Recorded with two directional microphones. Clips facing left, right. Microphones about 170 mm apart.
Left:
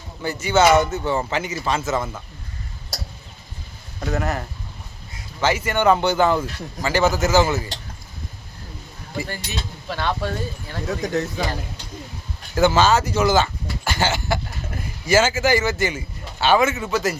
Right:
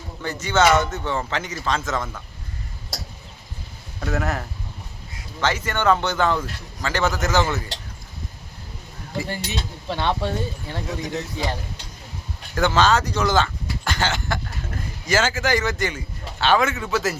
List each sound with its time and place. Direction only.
0.2 s speech: 10° left (ahead or behind)
4.0 s speech: centre (ahead or behind)
9.2 s speech: 25° right (ahead or behind)
11.0 s speech: 45° left (ahead or behind)
12.5 s speech: 5° left (ahead or behind)